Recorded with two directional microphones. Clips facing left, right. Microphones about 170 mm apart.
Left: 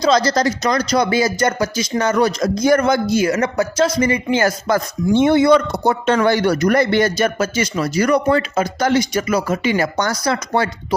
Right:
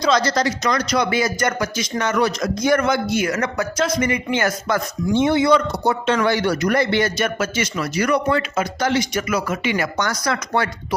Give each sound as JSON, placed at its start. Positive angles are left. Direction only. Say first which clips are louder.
{"t": 0.0, "sound": "speech", "louder": "left 3 dB", "side_deg": 35}
{"t": 5.1, "sound": "speech", "louder": "left 4 dB", "side_deg": 50}